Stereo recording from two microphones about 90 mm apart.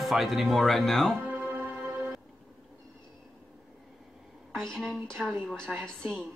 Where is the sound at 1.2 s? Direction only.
15° right (ahead or behind).